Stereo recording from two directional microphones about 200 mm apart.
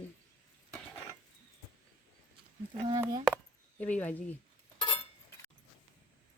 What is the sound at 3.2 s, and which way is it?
Chop, 5° left (ahead or behind).